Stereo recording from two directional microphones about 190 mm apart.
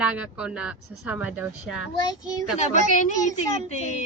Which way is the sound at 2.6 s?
40° left (ahead or behind).